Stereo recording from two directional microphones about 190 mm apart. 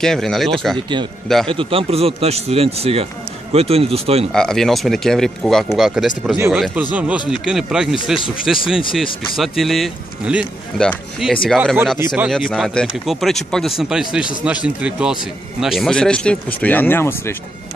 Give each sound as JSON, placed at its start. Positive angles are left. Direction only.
{"t": 0.0, "sound": "speech", "side_deg": 0}
{"t": 1.5, "sound": "speech", "side_deg": -30}
{"t": 4.3, "sound": "speech", "side_deg": 0}
{"t": 6.3, "sound": "speech", "side_deg": -10}